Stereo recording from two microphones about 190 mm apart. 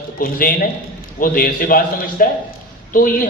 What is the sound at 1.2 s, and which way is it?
A man's voice, 45° left (ahead or behind).